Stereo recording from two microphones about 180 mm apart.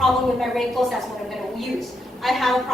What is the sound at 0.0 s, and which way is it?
Speech, centre (ahead or behind).